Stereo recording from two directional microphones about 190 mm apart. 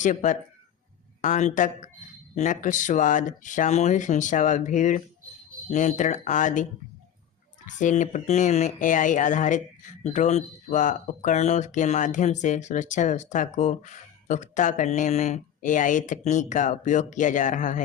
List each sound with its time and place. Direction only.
0.0 s speech: 40° left (ahead or behind)
7.7 s speech: 40° left (ahead or behind)